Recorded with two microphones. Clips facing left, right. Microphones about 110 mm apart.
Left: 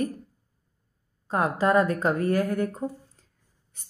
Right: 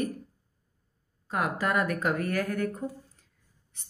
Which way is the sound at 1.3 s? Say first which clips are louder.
Left 6 dB; 30° left (ahead or behind).